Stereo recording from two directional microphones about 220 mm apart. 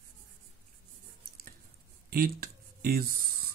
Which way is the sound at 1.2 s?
45° right (ahead or behind).